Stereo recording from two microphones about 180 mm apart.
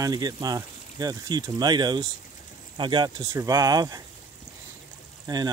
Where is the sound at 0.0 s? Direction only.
20° right (ahead or behind).